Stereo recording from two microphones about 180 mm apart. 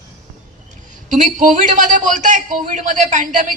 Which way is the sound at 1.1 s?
45° right (ahead or behind).